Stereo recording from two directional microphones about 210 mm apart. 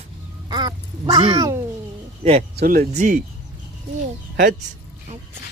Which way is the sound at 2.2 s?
30° right (ahead or behind).